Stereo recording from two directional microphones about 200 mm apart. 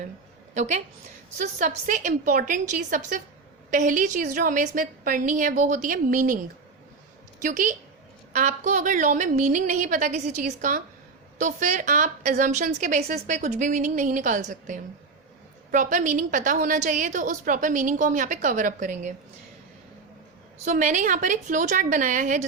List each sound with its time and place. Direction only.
0.5 s a woman's voice: 35° right (ahead or behind)
7.4 s a woman's voice: 40° right (ahead or behind)
20.7 s a woman's voice: 40° right (ahead or behind)